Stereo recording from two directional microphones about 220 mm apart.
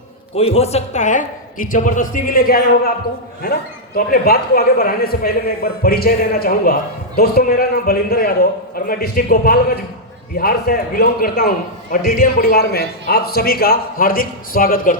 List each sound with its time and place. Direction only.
0.3 s a man's voice: 25° left (ahead or behind)